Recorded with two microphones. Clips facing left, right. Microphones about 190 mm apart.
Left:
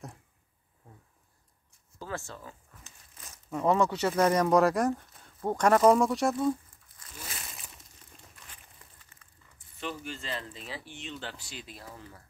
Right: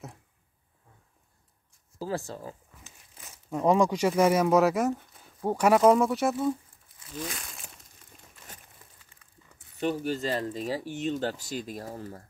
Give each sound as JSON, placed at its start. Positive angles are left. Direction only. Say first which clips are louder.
{"t": 2.0, "sound": "speech", "louder": "right 6 dB", "side_deg": -35}
{"t": 3.4, "sound": "speech", "louder": "right 3 dB", "side_deg": -15}
{"t": 9.2, "sound": "biting", "louder": "left 1 dB", "side_deg": -10}
{"t": 9.8, "sound": "speech", "louder": "right 10 dB", "side_deg": -40}